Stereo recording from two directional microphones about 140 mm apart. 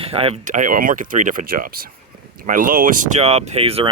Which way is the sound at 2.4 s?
75° right (ahead or behind).